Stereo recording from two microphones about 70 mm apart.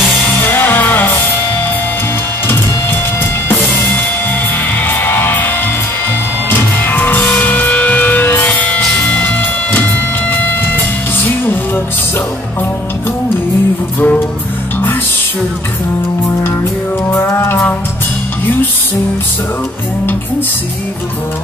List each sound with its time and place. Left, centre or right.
0.2 s music: left
2.4 s music: left
4.8 s music: left
6.5 s music: left
11.1 s music: left
13.9 s music: left
17.1 s music: left